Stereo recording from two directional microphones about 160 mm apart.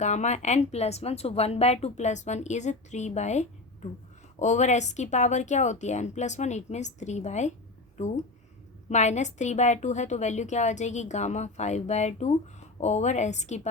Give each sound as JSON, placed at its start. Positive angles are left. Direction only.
{"t": 0.0, "sound": "a woman's voice", "side_deg": 45}